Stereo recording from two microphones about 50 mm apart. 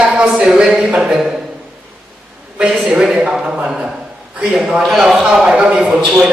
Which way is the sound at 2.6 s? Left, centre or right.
Right.